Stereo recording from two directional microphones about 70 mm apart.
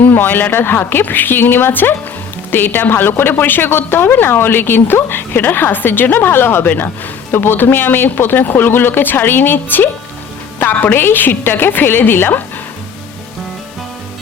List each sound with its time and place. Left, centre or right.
0.0 s a woman's voice: left